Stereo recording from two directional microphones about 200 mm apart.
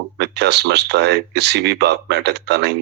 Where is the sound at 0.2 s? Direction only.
60° right (ahead or behind).